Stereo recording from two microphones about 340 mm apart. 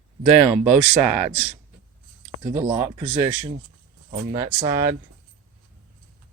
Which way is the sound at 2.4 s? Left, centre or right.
Centre.